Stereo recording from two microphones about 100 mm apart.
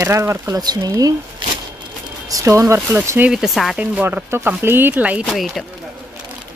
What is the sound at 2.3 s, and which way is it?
Speech, 30° right (ahead or behind).